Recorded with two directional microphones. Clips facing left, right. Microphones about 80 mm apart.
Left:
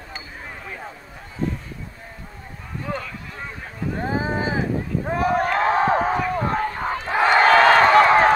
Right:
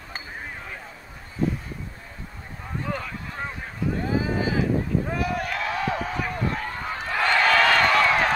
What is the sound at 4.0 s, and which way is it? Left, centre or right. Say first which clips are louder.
Boat: left 3 dB; left.